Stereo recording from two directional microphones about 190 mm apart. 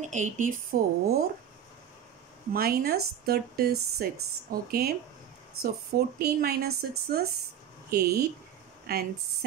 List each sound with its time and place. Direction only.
0.0 s speech: 40° right (ahead or behind)
2.5 s speech: 55° right (ahead or behind)